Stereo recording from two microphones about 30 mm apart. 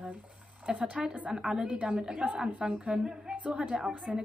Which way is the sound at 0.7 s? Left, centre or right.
Right.